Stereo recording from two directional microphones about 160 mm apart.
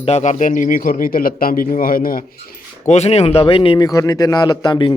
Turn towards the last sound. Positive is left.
turn(degrees=25)  # may be behind; listen again after turning